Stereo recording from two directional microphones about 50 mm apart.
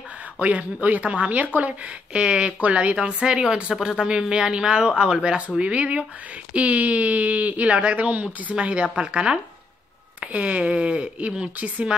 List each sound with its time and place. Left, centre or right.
0.4 s a woman's voice: right